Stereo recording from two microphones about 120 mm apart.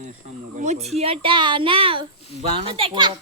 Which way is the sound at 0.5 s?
75° right (ahead or behind).